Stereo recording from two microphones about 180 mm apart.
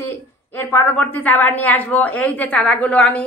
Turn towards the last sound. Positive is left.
turn(degrees=5)  # may be behind; listen again after turning